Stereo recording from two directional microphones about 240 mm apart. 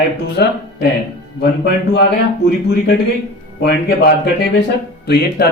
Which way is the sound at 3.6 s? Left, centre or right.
Left.